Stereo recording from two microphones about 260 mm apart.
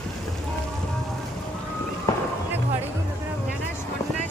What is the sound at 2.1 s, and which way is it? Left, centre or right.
Fireworks, centre.